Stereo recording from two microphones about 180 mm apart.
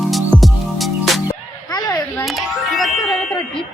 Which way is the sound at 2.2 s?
Centre (ahead or behind).